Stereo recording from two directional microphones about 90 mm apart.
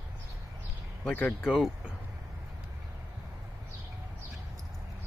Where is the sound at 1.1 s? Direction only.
15° left (ahead or behind).